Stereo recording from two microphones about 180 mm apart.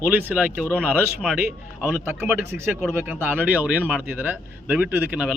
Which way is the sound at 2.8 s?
10° right (ahead or behind).